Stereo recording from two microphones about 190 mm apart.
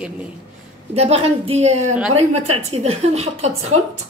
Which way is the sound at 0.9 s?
30° right (ahead or behind).